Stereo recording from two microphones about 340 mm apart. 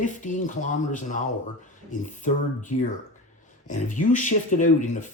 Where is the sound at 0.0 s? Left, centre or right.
Left.